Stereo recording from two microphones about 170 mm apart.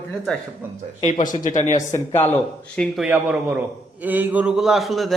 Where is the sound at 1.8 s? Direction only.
15° left (ahead or behind).